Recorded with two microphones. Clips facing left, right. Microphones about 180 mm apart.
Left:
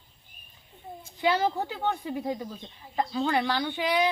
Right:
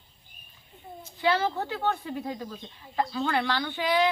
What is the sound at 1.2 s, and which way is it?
Speech, 15° left (ahead or behind).